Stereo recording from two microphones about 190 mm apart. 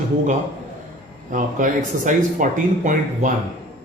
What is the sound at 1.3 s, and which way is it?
Speech, 45° right (ahead or behind).